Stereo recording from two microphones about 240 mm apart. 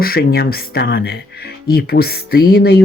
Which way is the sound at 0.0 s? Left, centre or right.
Left.